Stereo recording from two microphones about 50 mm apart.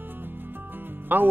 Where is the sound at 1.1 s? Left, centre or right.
Right.